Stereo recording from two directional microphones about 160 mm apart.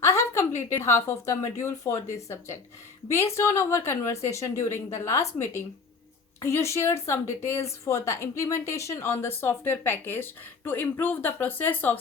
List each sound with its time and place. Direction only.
0.0 s a woman's voice: 15° left (ahead or behind)
6.4 s a woman's voice: 15° left (ahead or behind)